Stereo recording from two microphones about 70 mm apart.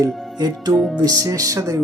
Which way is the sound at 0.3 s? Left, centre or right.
Right.